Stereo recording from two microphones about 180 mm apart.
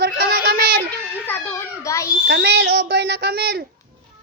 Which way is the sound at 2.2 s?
65° right (ahead or behind).